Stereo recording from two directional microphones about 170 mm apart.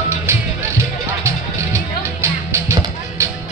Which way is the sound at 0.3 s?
15° right (ahead or behind).